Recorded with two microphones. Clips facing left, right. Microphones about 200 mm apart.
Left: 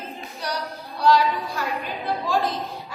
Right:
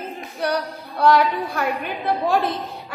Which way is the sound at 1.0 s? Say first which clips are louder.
Right 2 dB; 60° right (ahead or behind).